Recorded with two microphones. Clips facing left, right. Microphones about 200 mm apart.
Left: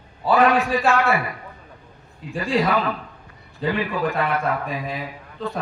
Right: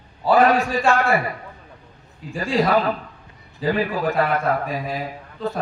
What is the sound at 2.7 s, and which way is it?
A man's voice, 40° right (ahead or behind).